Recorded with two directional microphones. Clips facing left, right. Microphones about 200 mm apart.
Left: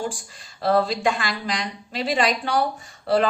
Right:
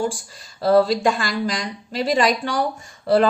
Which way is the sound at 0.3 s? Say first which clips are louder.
Right 3 dB; 40° right (ahead or behind).